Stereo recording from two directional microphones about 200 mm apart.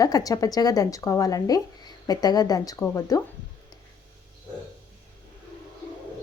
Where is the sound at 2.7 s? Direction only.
5° left (ahead or behind).